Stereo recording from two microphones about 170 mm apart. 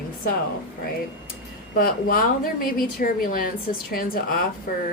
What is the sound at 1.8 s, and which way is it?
A woman's voice, 60° left (ahead or behind).